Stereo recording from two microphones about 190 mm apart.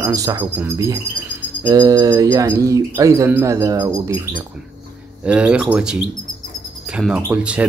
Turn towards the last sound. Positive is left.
turn(degrees=-5)  # may be behind; listen again after turning